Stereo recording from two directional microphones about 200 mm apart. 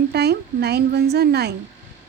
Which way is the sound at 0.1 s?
55° right (ahead or behind).